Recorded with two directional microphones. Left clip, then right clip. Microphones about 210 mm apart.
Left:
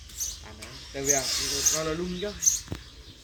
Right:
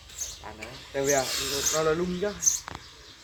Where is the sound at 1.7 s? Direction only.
35° right (ahead or behind).